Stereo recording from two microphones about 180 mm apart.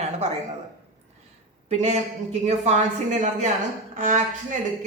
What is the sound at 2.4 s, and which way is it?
A woman's voice, 40° right (ahead or behind).